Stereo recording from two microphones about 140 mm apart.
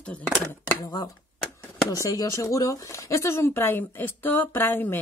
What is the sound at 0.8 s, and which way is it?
Speech, 30° left (ahead or behind).